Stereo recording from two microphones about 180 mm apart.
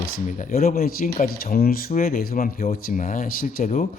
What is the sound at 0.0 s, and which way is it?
Speech, 45° left (ahead or behind).